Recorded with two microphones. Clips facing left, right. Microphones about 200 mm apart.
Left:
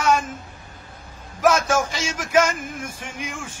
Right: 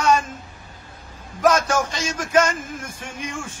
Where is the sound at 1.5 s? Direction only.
10° left (ahead or behind).